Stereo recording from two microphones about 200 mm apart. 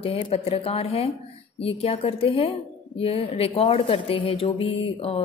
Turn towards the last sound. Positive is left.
turn(degrees=30)  # may be behind; listen again after turning